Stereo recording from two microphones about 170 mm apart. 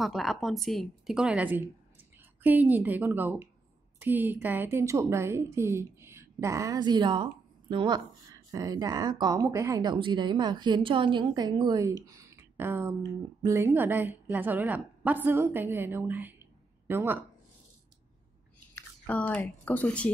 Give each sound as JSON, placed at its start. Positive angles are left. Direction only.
{"t": 0.0, "sound": "a woman's voice", "side_deg": 0}
{"t": 18.8, "sound": "speech", "side_deg": 10}